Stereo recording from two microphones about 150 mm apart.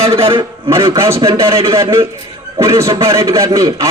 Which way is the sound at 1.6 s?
35° right (ahead or behind).